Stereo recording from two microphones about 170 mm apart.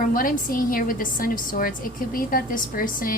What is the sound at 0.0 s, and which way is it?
A woman's voice, 55° left (ahead or behind).